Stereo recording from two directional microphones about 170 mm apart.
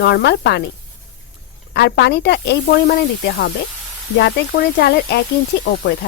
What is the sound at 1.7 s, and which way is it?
Speech, 75° left (ahead or behind).